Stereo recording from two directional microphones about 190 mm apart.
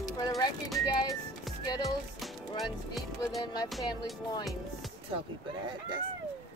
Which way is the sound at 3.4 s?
20° left (ahead or behind).